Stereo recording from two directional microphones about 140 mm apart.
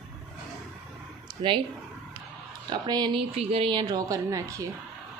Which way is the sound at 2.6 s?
30° right (ahead or behind).